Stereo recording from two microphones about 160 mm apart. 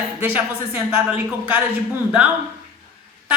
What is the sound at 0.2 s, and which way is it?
Speech, 15° right (ahead or behind).